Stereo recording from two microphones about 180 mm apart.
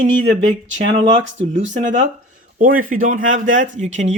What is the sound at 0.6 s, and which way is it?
Speech, 90° right.